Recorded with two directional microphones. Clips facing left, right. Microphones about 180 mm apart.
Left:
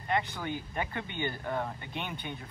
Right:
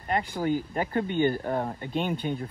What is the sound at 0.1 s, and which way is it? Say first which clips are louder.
Speech: right 6 dB; 40° right (ahead or behind).